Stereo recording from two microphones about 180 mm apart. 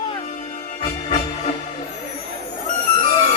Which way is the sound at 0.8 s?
35° left (ahead or behind).